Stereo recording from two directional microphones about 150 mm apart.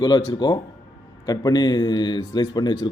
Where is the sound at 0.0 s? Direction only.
25° left (ahead or behind).